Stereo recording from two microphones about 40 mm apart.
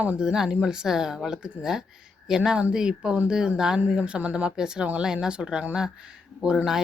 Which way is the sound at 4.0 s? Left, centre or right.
Right.